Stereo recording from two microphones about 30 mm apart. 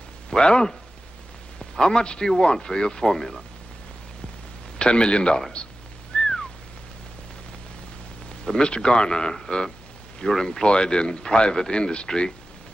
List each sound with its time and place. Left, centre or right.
0.4 s a man's voice: left
4.7 s a man's voice: left
6.1 s a sound: left
8.5 s a man's voice: left
10.2 s a man's voice: centre; by 12.1 s left